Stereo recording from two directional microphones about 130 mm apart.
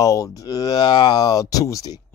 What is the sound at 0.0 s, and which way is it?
Speech, 25° left (ahead or behind).